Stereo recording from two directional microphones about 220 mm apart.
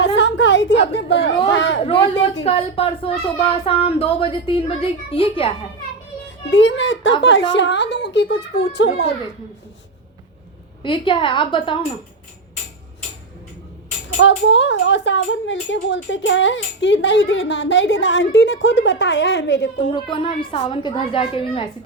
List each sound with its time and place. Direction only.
0.0 s a sound: 55° left (ahead or behind)
1.5 s speech: 55° left (ahead or behind)
1.8 s speech: 25° left (ahead or behind)
6.5 s speech: 55° left (ahead or behind)
10.8 s speech: 25° left (ahead or behind)
14.2 s speech: 55° left (ahead or behind)
19.9 s speech: 20° left (ahead or behind)